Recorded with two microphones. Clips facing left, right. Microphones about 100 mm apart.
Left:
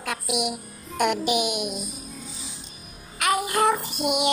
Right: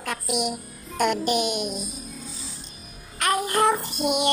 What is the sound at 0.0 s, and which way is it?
A child's voice, 5° left (ahead or behind).